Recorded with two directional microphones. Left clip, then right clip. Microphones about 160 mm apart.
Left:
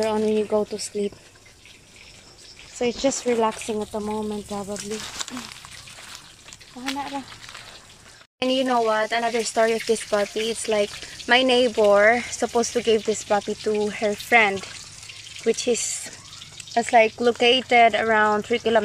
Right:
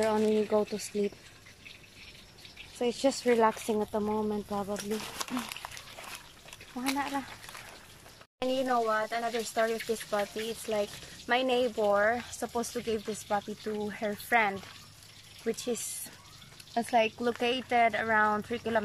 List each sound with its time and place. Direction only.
0.0 s speech: 5° left (ahead or behind)
3.0 s speech: 15° left (ahead or behind)
3.3 s speech: 5° left (ahead or behind)
5.1 s speech: 10° right (ahead or behind)
8.4 s speech: 5° left (ahead or behind)